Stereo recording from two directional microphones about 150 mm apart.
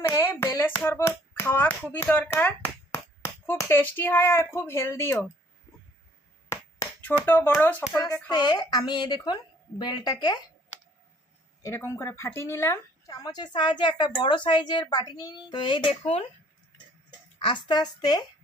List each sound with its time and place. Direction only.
0.0 s speech: 15° left (ahead or behind)
6.5 s a sound: 15° left (ahead or behind)
7.6 s speech: 10° left (ahead or behind)
8.3 s speech: 30° left (ahead or behind)
11.6 s speech: 20° left (ahead or behind); by 16.2 s 40° left (ahead or behind)
17.4 s speech: 30° left (ahead or behind)